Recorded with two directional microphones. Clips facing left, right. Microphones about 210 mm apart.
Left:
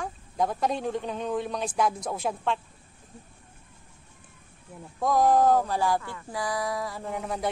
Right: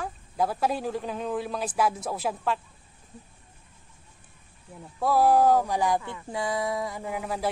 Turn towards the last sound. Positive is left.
turn(degrees=-5)  # may be behind; listen again after turning